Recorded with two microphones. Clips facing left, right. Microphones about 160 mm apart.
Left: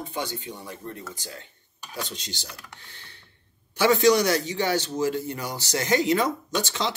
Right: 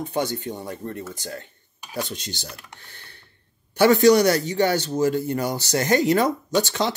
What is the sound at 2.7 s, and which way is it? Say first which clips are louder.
A man's voice: right 2 dB; 50° right (ahead or behind).